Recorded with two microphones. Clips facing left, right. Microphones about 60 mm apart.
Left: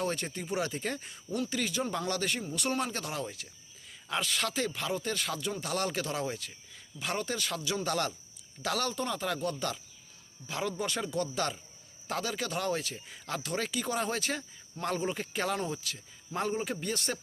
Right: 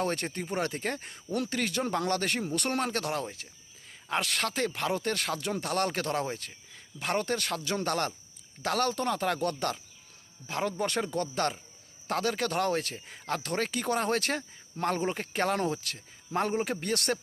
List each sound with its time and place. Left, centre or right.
0.0 s speech: right
3.2 s speech: right
4.1 s speech: right